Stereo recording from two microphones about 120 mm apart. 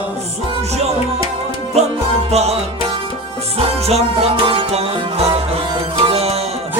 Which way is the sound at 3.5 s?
60° right (ahead or behind).